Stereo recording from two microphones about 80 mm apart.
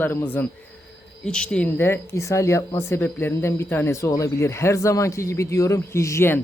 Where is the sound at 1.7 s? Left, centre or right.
Left.